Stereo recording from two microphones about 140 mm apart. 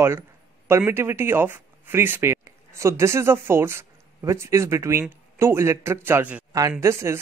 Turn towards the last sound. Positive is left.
turn(degrees=-20)  # may be behind; listen again after turning